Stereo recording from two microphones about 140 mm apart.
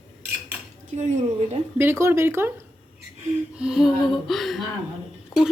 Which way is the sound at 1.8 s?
15° right (ahead or behind).